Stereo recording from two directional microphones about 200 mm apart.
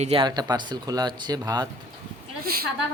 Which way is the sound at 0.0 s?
25° right (ahead or behind).